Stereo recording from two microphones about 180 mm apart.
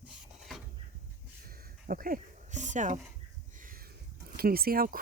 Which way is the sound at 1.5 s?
55° right (ahead or behind).